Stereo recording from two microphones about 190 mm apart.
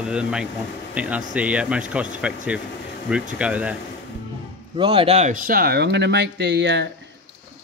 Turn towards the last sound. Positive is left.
turn(degrees=-65)  # may be behind; listen again after turning